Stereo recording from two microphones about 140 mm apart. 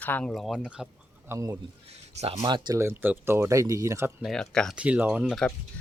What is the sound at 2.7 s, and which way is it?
Speech, 15° right (ahead or behind).